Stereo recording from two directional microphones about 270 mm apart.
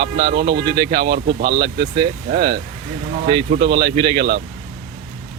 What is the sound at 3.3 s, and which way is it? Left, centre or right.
Speech, centre.